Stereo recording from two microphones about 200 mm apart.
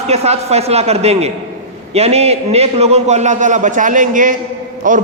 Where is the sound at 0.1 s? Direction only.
30° right (ahead or behind).